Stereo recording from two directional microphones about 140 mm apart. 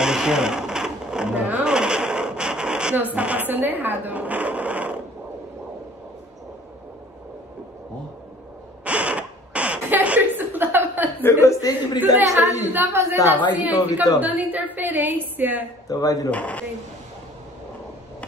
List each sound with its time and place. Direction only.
0.0 s a sound: 5° right (ahead or behind)
3.2 s speech: 10° right (ahead or behind)
8.8 s zipper: 10° right (ahead or behind)
11.2 s a woman's voice: 25° left (ahead or behind)
12.6 s a woman's voice: 15° right (ahead or behind)
13.4 s a woman's voice: 25° left (ahead or behind)
14.2 s a woman's voice: 10° right (ahead or behind)
15.9 s a woman's voice: 25° left (ahead or behind)
16.3 s speech: 10° left (ahead or behind)